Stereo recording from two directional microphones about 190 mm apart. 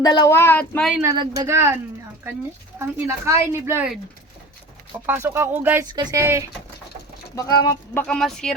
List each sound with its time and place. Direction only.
0.0 s speech: 20° left (ahead or behind); by 1.0 s centre (ahead or behind)
1.0 s speech: 20° right (ahead or behind)
5.0 s speech: 10° right (ahead or behind)
5.9 s speech: 20° right (ahead or behind)
7.3 s speech: 20° left (ahead or behind)
8.0 s speech: 5° left (ahead or behind)